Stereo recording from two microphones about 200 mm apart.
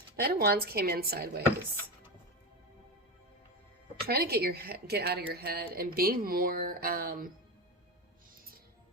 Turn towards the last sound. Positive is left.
turn(degrees=-45)  # may be behind; listen again after turning